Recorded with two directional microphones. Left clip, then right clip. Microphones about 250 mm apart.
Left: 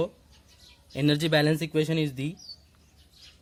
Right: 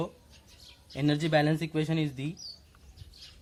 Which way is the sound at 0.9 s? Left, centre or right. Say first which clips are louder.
Left 3 dB; left.